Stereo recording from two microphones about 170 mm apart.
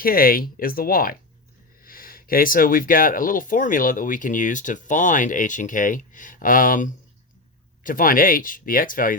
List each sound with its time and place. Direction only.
0.0 s speech: 60° left (ahead or behind)